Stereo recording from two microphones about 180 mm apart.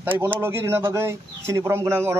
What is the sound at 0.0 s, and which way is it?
Speech, 10° right (ahead or behind).